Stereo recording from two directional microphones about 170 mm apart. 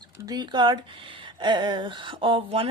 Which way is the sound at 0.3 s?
25° right (ahead or behind).